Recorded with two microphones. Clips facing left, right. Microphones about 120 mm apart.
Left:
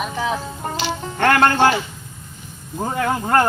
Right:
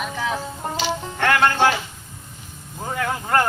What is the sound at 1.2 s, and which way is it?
Music, 45° left (ahead or behind).